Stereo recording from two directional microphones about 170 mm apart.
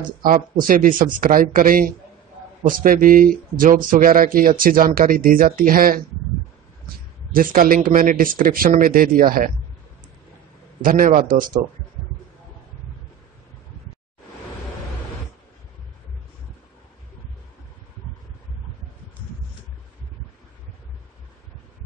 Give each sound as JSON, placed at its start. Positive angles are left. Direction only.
{"t": 0.2, "sound": "speech", "side_deg": -55}
{"t": 7.3, "sound": "speech", "side_deg": -55}
{"t": 10.8, "sound": "a man's voice", "side_deg": -55}